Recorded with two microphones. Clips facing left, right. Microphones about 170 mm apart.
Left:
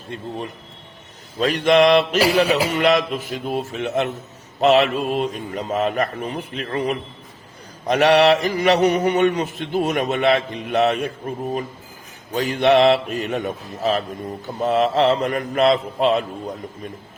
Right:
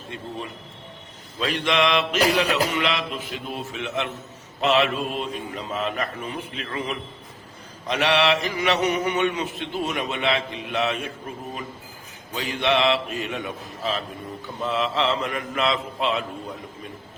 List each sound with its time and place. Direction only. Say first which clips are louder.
1.4 s mantra: left 7 dB; 45° left (ahead or behind)
2.7 s a man's voice: left 8 dB; 45° left (ahead or behind)
4.6 s mantra: left 5 dB; 40° left (ahead or behind)
12.3 s a man's voice: left 7 dB; 45° left (ahead or behind)
14.4 s mantra: left 7 dB; 45° left (ahead or behind)